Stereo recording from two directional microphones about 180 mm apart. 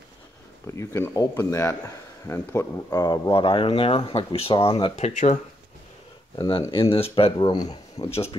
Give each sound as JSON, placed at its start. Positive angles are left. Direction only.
{"t": 0.7, "sound": "speech", "side_deg": 15}
{"t": 4.9, "sound": "speech", "side_deg": 40}
{"t": 6.3, "sound": "speech", "side_deg": 25}
{"t": 8.1, "sound": "speech", "side_deg": 35}